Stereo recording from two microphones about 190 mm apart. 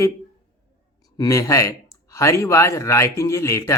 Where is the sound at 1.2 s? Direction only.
15° left (ahead or behind).